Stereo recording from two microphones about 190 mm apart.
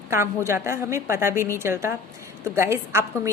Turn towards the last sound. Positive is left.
turn(degrees=-15)  # may be behind; listen again after turning